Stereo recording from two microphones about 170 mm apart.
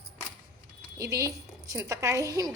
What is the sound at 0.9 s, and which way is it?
A woman's voice, 20° right (ahead or behind).